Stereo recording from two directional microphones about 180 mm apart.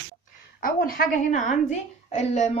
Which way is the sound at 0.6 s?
55° left (ahead or behind).